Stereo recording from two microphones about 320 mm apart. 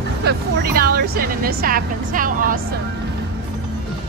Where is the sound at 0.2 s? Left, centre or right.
Right.